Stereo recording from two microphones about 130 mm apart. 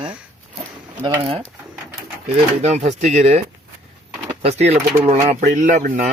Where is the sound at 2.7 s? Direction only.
60° right (ahead or behind).